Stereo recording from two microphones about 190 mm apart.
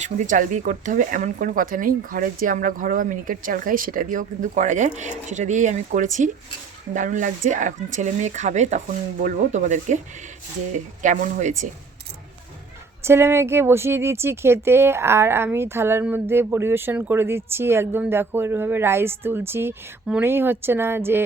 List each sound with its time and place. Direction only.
0.0 s speech: 40° right (ahead or behind)
11.0 s speech: 40° right (ahead or behind)
13.0 s speech: 15° right (ahead or behind)